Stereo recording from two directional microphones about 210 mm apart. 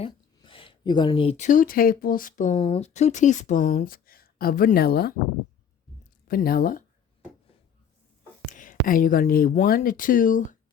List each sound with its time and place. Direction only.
0.0 s speech: 25° left (ahead or behind); by 5.1 s 45° left (ahead or behind)
6.2 s speech: 45° left (ahead or behind)
8.4 s speech: 40° left (ahead or behind)